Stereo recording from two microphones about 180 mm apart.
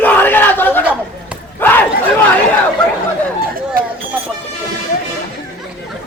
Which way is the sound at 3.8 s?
55° right (ahead or behind).